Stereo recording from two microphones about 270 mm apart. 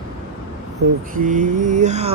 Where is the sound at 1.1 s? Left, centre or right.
Right.